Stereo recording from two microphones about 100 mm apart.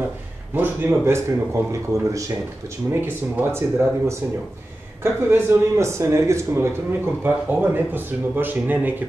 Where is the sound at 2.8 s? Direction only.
20° right (ahead or behind).